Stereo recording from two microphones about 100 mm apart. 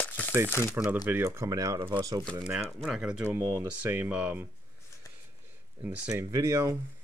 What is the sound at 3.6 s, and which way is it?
Speech, 20° right (ahead or behind).